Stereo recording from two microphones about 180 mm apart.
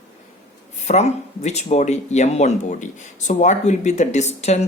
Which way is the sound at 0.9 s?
40° left (ahead or behind).